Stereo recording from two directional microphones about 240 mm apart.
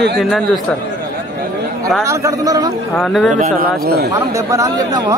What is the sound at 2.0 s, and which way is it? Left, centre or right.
Speech, centre.